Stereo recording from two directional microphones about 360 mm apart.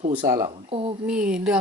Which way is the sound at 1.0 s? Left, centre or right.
Centre.